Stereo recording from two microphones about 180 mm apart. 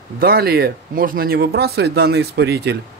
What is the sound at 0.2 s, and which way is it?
A man's voice, 60° right (ahead or behind).